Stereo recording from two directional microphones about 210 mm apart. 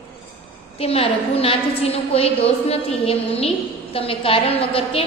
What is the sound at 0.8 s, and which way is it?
A woman's voice, 30° left (ahead or behind).